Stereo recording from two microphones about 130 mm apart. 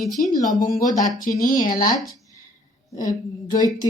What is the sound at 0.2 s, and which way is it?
Speech, 90° left.